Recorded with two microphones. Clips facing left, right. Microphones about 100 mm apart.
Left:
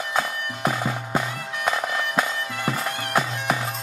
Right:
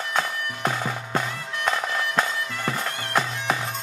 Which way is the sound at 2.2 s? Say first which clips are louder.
Left 1 dB; 10° left (ahead or behind).